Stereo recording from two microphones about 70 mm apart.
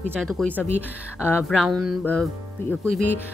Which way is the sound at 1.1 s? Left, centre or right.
Left.